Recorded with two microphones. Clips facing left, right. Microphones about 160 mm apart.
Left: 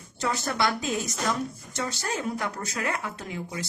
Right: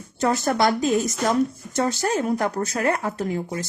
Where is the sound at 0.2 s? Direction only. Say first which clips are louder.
Right 7 dB; 45° right (ahead or behind).